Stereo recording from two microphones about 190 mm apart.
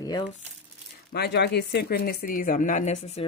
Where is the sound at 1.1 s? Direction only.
60° left (ahead or behind); by 3.0 s 40° left (ahead or behind).